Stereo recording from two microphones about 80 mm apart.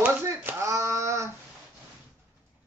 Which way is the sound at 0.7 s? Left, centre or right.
Right.